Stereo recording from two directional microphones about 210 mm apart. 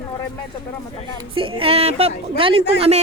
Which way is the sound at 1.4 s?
25° right (ahead or behind).